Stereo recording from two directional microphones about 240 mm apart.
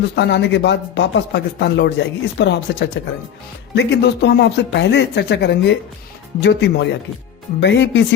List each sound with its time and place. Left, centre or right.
0.2 s speech: left